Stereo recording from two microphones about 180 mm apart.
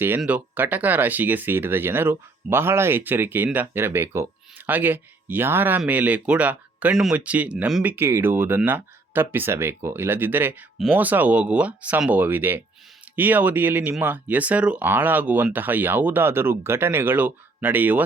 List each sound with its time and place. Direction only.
0.2 s speech: 10° right (ahead or behind)